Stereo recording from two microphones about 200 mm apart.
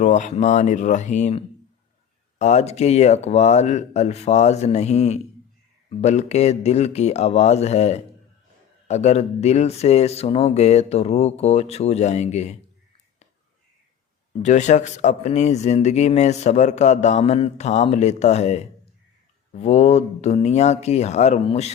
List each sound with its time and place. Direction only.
0.0 s speech: 35° left (ahead or behind)
14.3 s speech: 35° left (ahead or behind)